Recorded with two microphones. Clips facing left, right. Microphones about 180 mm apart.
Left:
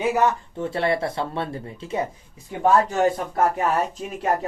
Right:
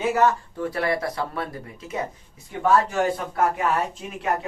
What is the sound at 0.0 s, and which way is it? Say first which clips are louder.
Speech: even; 15° left (ahead or behind).